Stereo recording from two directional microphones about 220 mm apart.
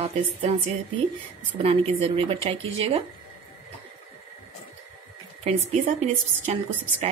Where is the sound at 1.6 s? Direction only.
25° right (ahead or behind).